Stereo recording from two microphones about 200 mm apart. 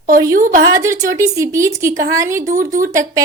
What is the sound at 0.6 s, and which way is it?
A woman's voice, 15° right (ahead or behind).